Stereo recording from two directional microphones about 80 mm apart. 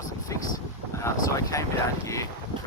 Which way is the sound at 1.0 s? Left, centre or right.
Left.